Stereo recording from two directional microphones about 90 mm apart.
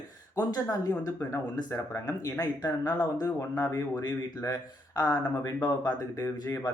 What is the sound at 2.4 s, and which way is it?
A woman's voice, 45° left (ahead or behind).